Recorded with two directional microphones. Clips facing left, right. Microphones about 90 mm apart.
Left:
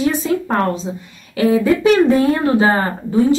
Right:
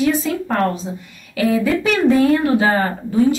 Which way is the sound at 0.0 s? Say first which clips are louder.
Left 1 dB; 25° left (ahead or behind).